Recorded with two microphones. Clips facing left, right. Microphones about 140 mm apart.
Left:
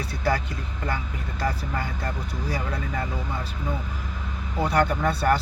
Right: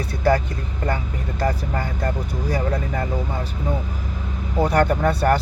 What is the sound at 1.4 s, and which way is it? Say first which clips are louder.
Speech: right 4 dB; 40° right (ahead or behind).